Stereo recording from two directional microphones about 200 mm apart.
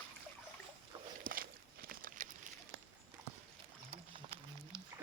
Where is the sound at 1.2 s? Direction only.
45° right (ahead or behind).